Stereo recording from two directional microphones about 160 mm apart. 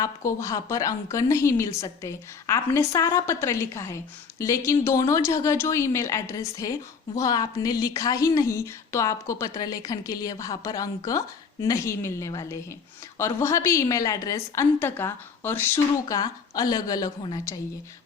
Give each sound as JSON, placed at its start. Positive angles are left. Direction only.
{"t": 0.0, "sound": "a woman's voice", "side_deg": 20}